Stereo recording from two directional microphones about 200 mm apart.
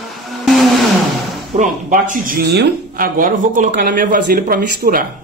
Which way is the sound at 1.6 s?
40° right (ahead or behind).